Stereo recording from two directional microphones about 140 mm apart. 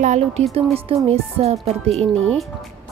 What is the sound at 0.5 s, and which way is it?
A woman's voice, 45° right (ahead or behind).